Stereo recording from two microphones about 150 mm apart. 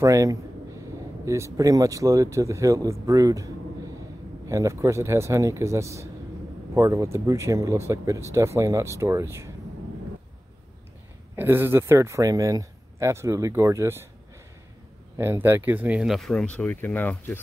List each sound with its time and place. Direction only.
0.0 s speech: 20° right (ahead or behind)
11.3 s speech: 15° right (ahead or behind)
15.1 s speech: 15° right (ahead or behind); by 17.4 s 10° left (ahead or behind)